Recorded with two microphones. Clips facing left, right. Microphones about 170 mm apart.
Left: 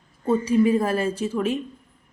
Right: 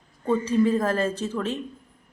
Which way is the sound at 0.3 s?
10° left (ahead or behind).